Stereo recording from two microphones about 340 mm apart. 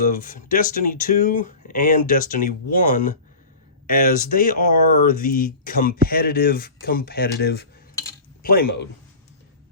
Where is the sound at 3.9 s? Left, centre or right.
Left.